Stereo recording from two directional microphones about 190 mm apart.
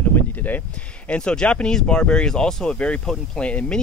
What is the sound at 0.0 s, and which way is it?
Speech, 10° left (ahead or behind).